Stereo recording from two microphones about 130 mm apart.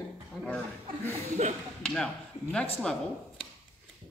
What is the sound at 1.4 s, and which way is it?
Speech, 65° right (ahead or behind).